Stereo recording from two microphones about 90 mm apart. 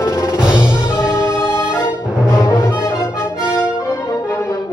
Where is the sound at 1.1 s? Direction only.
30° left (ahead or behind).